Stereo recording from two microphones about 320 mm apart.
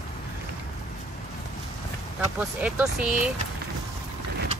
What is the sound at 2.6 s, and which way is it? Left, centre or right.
Speech, centre.